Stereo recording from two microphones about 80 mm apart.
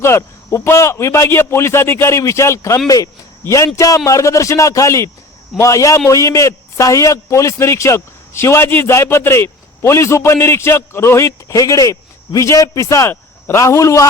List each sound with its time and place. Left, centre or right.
0.0 s a man's voice: left